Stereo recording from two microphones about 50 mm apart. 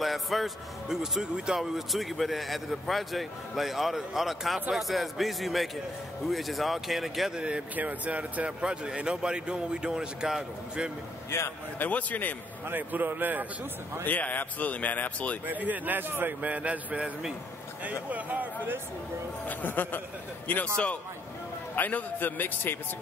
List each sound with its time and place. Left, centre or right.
0.0 s speech: centre
1.2 s speech: centre
7.3 s speech: right
7.7 s speech: right
8.5 s speech: centre
11.2 s a man's voice: left
11.8 s speech: left
12.6 s a man's voice: right
14.0 s speech: left
15.4 s a man's voice: right
16.3 s a man's voice: right
19.4 s speech: left
20.6 s a man's voice: left
21.7 s speech: left